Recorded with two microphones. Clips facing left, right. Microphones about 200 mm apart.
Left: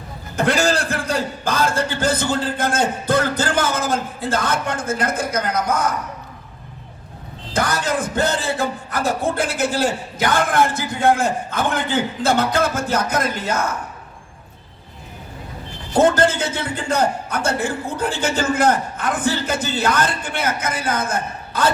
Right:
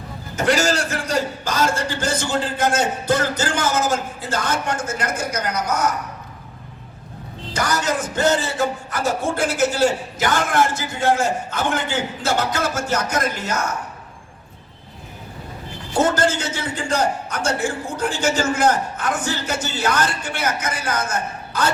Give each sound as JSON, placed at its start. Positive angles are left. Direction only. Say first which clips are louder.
{"t": 0.3, "sound": "a man's voice", "louder": "left 1 dB", "side_deg": 55}
{"t": 7.5, "sound": "speech", "louder": "left 1 dB", "side_deg": 55}
{"t": 16.2, "sound": "speech", "louder": "left 2 dB", "side_deg": 55}